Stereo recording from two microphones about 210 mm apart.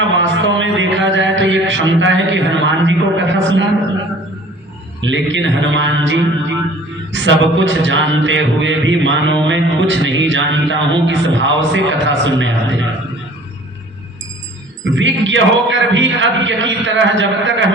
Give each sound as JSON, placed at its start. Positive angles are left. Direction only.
{"t": 0.0, "sound": "a man's voice", "side_deg": -60}
{"t": 4.9, "sound": "a man's voice", "side_deg": -60}
{"t": 14.9, "sound": "a man's voice", "side_deg": -65}